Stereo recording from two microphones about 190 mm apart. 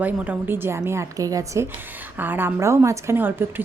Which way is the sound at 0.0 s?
10° right (ahead or behind).